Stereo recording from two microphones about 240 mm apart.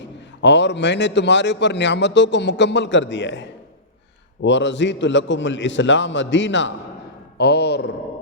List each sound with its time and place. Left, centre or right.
0.4 s a man's voice: left